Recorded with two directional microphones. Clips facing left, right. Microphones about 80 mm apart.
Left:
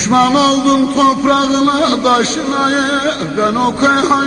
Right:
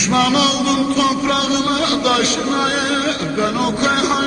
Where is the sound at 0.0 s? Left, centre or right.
Left.